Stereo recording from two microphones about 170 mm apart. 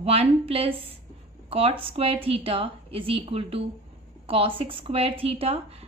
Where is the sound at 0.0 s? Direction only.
35° right (ahead or behind).